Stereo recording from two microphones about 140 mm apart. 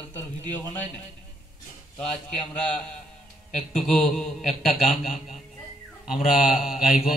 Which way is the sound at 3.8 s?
Centre (ahead or behind).